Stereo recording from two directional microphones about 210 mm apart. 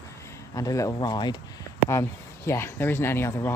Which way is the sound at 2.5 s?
10° left (ahead or behind).